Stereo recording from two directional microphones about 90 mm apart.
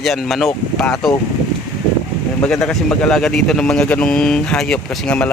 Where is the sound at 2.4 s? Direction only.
5° left (ahead or behind).